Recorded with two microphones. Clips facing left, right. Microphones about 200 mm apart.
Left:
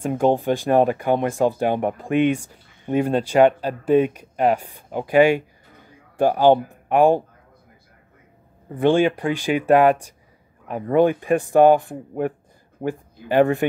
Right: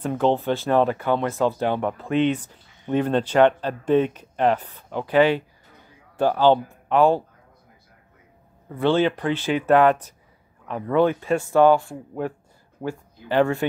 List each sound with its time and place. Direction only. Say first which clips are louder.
0.0 s speech: left 2 dB; 15° left (ahead or behind)
8.7 s speech: left 3 dB; 15° left (ahead or behind)